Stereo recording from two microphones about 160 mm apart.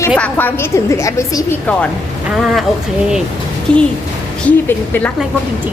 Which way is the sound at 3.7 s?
5° left (ahead or behind).